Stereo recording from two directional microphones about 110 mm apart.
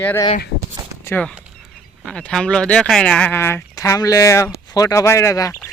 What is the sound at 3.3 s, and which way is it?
Speech, 20° left (ahead or behind).